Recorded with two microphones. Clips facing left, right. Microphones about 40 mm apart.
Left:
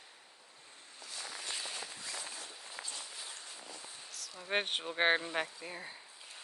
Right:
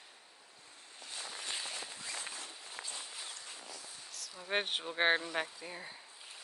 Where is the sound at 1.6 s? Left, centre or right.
Centre.